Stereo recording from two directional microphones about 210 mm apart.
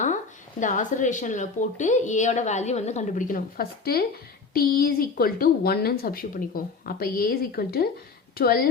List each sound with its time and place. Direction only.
0.6 s a woman's voice: 35° left (ahead or behind)